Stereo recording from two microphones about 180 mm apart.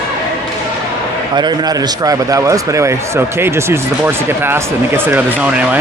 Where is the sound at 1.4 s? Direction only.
20° right (ahead or behind).